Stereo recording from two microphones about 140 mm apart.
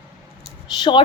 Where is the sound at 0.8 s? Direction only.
35° left (ahead or behind).